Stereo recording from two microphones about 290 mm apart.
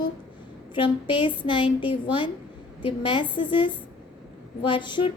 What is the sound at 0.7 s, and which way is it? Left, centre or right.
A woman's voice, centre.